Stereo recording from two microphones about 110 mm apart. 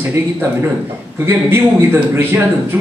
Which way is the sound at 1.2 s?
20° right (ahead or behind).